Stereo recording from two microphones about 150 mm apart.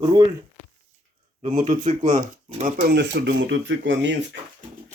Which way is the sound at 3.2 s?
90° right.